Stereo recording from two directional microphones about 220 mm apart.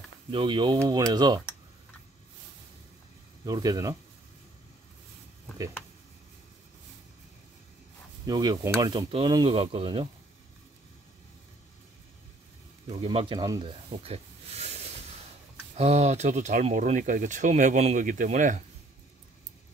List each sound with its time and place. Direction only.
0.3 s speech: 20° right (ahead or behind)
3.4 s speech: 15° right (ahead or behind)
8.3 s speech: 15° right (ahead or behind)
12.8 s speech: 25° right (ahead or behind)